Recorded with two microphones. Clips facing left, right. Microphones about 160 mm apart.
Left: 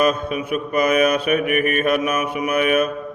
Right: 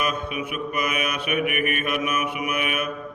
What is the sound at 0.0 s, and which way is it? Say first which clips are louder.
Mantra: left 8 dB; 35° left (ahead or behind).